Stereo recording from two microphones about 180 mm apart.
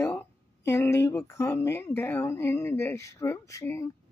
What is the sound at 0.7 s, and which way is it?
Speech, 15° left (ahead or behind).